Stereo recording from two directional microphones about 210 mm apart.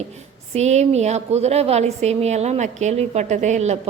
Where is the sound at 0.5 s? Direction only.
30° right (ahead or behind).